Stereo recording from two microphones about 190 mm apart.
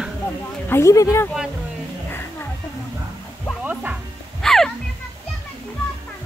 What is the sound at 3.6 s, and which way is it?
Music, 10° right (ahead or behind).